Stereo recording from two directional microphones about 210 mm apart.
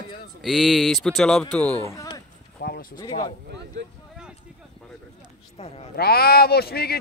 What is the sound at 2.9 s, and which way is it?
Speech, 20° left (ahead or behind).